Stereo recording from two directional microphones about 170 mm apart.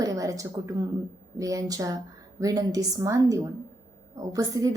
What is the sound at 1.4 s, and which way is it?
A woman's voice, 20° right (ahead or behind).